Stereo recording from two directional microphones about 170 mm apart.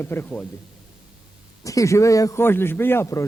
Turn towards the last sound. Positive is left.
turn(degrees=15)  # may be behind; listen again after turning